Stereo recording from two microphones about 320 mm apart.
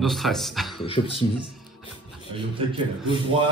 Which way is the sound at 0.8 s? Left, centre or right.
Centre.